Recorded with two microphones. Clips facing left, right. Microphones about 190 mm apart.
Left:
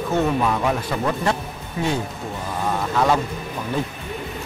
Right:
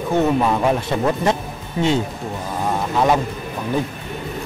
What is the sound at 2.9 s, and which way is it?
Speech, 15° right (ahead or behind).